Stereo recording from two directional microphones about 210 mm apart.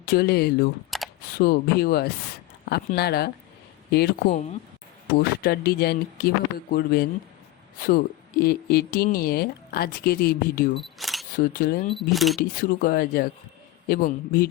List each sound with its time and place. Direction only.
0.0 s speech: 50° left (ahead or behind)
0.9 s camera: centre (ahead or behind)
1.4 s speech: 45° left (ahead or behind)
5.4 s speech: 50° left (ahead or behind)
10.8 s single-lens reflex camera: centre (ahead or behind)
11.3 s speech: 40° left (ahead or behind)
11.9 s speech: centre (ahead or behind)
12.4 s speech: 40° left (ahead or behind)